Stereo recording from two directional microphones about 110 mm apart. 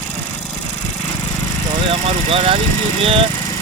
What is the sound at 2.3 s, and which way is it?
Speech, 60° right (ahead or behind).